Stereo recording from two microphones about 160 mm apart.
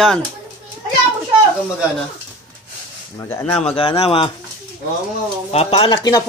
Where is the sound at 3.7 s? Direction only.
40° left (ahead or behind).